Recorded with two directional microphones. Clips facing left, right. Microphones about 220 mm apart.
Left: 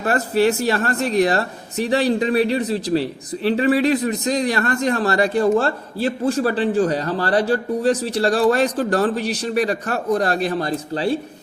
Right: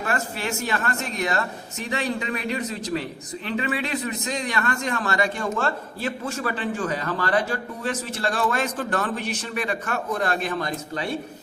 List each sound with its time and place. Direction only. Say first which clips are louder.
0.0 s speech: left 10 dB; 35° left (ahead or behind)